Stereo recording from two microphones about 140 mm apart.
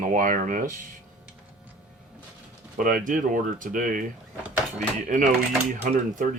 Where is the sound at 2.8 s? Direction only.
90° right.